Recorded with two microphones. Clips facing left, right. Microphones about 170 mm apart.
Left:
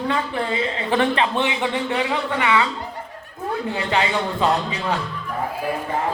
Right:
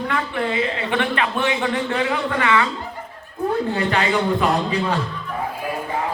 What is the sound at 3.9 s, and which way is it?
Speech, 20° left (ahead or behind).